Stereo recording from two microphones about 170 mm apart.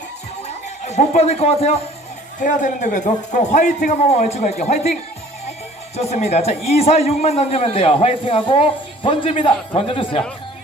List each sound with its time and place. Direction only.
0.4 s speech: 40° left (ahead or behind)
2.4 s a man's voice: 50° left (ahead or behind)
6.0 s a man's voice: 40° left (ahead or behind)